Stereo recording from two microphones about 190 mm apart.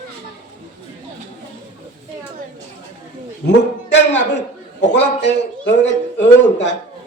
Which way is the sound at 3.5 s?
70° left (ahead or behind).